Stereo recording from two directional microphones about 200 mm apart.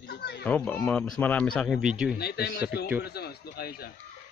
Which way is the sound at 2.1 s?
55° left (ahead or behind).